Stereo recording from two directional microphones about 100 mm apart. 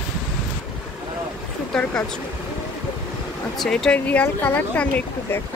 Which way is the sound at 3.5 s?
5° left (ahead or behind).